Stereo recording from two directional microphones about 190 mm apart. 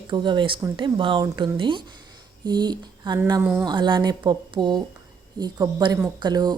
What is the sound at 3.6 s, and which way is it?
Speech, 25° right (ahead or behind).